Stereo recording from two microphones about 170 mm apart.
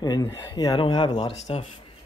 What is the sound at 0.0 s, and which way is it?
Speech, 20° left (ahead or behind).